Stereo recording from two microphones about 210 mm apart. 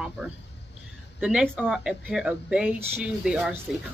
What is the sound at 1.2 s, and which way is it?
Speech, 5° right (ahead or behind).